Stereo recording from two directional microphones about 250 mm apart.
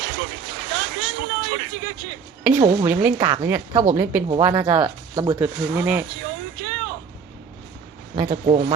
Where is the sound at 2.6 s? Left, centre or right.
Centre.